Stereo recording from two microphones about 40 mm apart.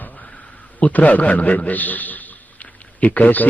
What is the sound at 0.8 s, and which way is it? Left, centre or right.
Speech, left.